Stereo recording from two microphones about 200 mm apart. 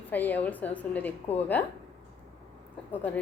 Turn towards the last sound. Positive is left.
turn(degrees=10)  # may be behind; listen again after turning